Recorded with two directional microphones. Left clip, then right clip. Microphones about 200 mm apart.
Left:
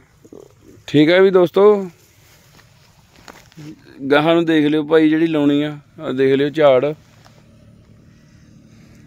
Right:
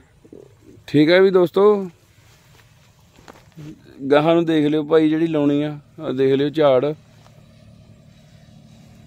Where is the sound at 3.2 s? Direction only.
55° left (ahead or behind).